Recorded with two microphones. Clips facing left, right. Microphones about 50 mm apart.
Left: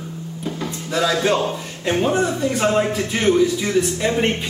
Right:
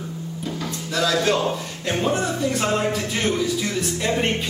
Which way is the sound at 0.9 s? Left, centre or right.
Centre.